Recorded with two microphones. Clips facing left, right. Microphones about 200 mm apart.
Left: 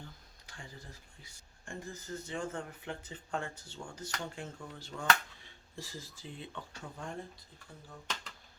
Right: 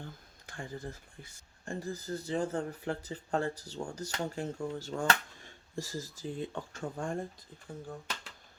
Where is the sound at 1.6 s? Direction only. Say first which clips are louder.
Right 6 dB; 35° right (ahead or behind).